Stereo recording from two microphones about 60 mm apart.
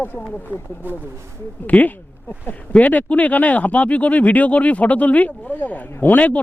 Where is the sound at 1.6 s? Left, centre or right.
Left.